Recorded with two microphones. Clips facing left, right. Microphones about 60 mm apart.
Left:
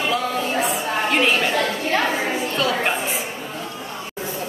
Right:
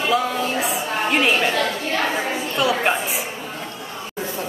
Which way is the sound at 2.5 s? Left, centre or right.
Centre.